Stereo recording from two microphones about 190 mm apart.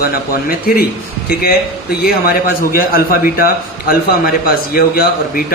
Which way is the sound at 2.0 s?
50° left (ahead or behind).